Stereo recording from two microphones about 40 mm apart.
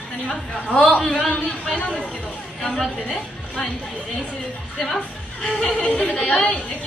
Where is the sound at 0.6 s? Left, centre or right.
Left.